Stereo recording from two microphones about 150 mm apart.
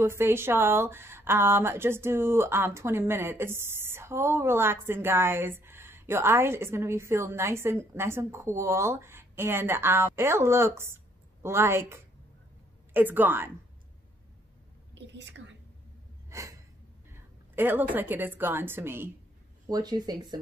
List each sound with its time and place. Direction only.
0.0 s speech: 15° right (ahead or behind)
16.3 s a sound: 20° right (ahead or behind)
17.6 s speech: 15° right (ahead or behind)
19.7 s speech: 25° right (ahead or behind)